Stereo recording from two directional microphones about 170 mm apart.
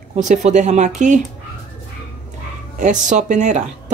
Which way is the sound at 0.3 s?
45° right (ahead or behind).